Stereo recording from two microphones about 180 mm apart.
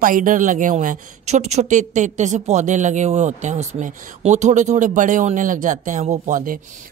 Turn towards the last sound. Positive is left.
turn(degrees=-40)  # may be behind; listen again after turning